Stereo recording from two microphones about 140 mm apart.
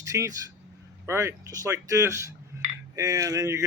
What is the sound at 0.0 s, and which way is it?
Speech, 20° right (ahead or behind).